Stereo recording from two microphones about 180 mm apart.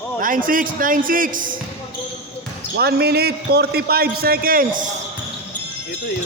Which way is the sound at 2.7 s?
60° right (ahead or behind).